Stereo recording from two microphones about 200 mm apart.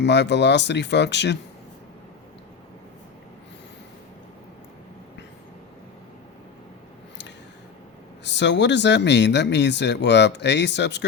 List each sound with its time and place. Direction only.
0.0 s speech: 60° left (ahead or behind)
8.2 s speech: 60° left (ahead or behind)